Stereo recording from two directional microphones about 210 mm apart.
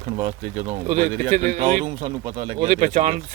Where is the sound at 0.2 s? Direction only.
25° right (ahead or behind).